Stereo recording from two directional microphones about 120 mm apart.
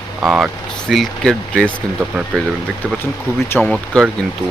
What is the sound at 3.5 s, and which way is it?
Speech, 15° left (ahead or behind).